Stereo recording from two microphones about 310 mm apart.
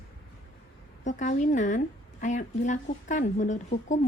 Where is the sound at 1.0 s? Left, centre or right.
Left.